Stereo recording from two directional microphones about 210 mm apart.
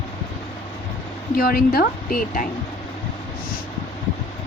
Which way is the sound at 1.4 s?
45° left (ahead or behind).